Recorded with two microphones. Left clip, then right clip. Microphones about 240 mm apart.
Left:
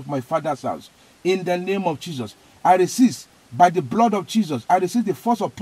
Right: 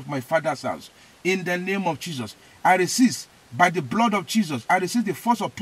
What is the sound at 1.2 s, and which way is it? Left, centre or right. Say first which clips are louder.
Speech: left 3 dB; right.